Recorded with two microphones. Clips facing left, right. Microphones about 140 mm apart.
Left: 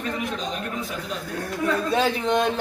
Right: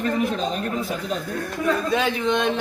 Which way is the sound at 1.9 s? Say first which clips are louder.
Even; 35° left (ahead or behind).